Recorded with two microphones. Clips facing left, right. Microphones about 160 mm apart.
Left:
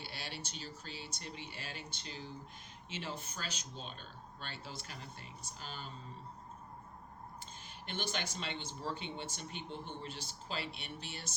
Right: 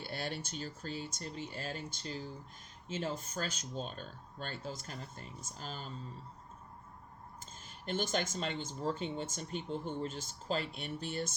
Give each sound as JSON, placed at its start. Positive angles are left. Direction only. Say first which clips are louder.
{"t": 0.0, "sound": "speech", "louder": "right 6 dB", "side_deg": -50}
{"t": 7.9, "sound": "speech", "louder": "right 6 dB", "side_deg": -45}